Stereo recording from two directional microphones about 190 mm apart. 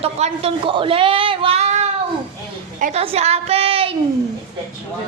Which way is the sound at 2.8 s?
45° right (ahead or behind).